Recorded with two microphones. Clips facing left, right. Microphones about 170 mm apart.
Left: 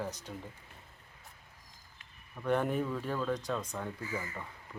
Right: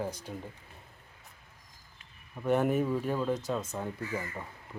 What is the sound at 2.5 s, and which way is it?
Speech, 10° right (ahead or behind).